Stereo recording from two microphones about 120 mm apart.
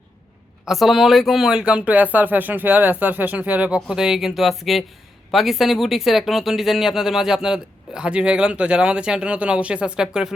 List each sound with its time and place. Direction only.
0.6 s speech: centre (ahead or behind)